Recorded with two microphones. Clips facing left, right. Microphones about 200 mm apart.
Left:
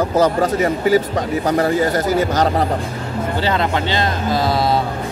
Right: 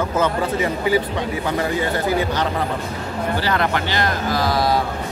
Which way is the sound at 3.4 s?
20° left (ahead or behind).